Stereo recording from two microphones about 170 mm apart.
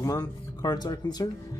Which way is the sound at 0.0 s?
20° left (ahead or behind).